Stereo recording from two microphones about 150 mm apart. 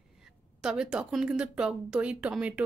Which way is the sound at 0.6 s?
5° right (ahead or behind).